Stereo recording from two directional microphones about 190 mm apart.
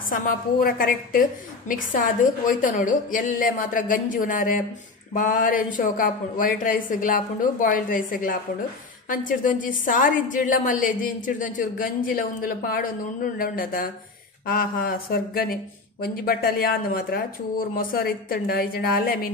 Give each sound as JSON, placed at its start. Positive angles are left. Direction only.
{"t": 0.1, "sound": "a woman's voice", "side_deg": 50}